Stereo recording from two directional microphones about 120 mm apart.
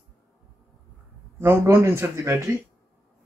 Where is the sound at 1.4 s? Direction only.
20° right (ahead or behind).